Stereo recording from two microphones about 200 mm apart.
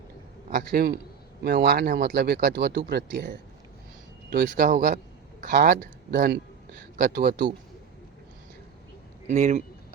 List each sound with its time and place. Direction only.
0.5 s speech: 50° right (ahead or behind)
4.4 s a man's voice: 40° right (ahead or behind)
9.2 s speech: 35° right (ahead or behind)